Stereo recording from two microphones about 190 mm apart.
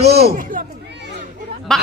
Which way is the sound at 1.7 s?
5° left (ahead or behind).